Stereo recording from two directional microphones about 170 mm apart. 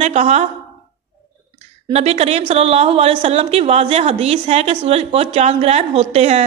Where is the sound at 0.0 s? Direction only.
40° right (ahead or behind).